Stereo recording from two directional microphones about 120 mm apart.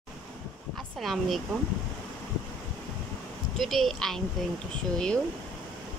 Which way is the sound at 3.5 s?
Centre (ahead or behind).